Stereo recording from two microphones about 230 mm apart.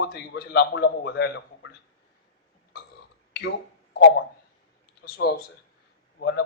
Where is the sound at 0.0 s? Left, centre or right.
Left.